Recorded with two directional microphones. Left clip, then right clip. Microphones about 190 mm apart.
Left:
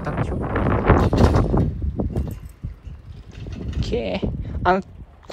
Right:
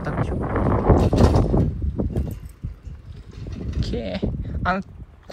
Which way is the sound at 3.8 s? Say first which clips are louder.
Left 4 dB; 20° left (ahead or behind).